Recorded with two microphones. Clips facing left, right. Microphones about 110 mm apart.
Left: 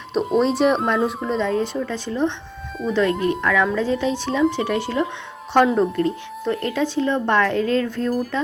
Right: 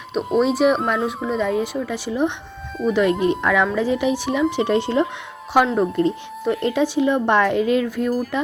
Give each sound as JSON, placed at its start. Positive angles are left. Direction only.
{"t": 0.1, "sound": "a woman's voice", "side_deg": 0}
{"t": 5.5, "sound": "speech", "side_deg": -10}
{"t": 6.0, "sound": "speech", "side_deg": -20}